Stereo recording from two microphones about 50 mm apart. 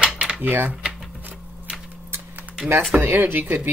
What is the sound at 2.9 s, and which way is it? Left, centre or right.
Speech, right.